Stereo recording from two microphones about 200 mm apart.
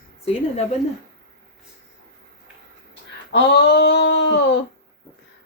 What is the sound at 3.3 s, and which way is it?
Speech, 60° left (ahead or behind).